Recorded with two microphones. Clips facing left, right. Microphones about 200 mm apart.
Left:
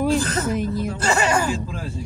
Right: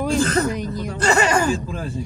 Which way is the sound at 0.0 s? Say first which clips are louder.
Right 1 dB; 5° left (ahead or behind).